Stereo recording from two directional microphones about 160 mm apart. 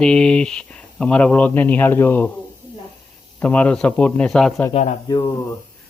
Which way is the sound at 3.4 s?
10° left (ahead or behind).